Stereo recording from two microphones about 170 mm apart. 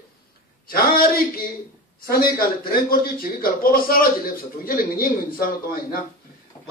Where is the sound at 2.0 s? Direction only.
60° left (ahead or behind).